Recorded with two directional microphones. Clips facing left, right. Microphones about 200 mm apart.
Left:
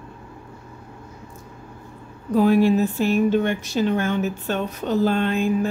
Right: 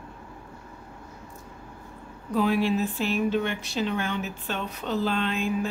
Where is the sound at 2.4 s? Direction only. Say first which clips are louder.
Left 7 dB; 45° left (ahead or behind).